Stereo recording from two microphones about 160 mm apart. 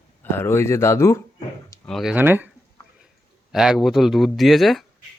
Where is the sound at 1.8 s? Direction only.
Centre (ahead or behind).